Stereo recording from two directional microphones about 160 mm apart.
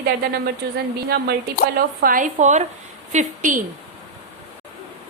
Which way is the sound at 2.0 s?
60° right (ahead or behind).